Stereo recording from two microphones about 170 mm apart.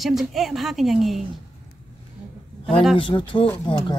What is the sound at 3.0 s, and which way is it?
Speech, 30° left (ahead or behind).